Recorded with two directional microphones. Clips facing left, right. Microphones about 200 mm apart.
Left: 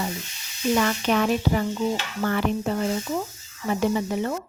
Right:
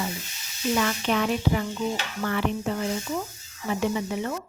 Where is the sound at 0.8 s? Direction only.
45° left (ahead or behind).